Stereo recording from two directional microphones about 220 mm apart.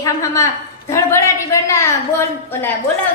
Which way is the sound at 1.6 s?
10° left (ahead or behind).